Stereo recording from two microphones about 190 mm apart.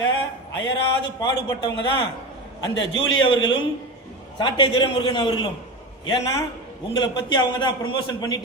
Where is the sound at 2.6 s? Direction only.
25° left (ahead or behind).